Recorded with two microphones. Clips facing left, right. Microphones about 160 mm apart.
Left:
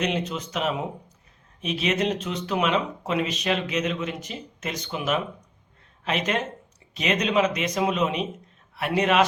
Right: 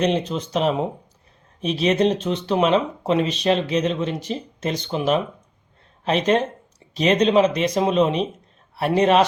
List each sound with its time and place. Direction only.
0.0 s a man's voice: 30° right (ahead or behind)